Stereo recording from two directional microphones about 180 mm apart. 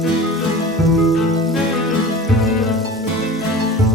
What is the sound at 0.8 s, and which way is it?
Music, centre (ahead or behind).